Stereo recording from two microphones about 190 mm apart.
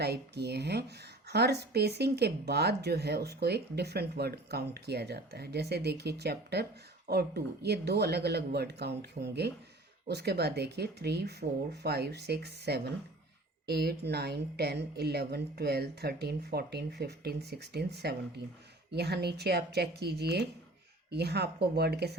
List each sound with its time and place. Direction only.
0.0 s speech: 60° right (ahead or behind)